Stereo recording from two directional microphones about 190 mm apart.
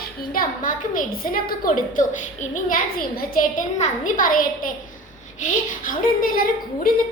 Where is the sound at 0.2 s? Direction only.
45° left (ahead or behind).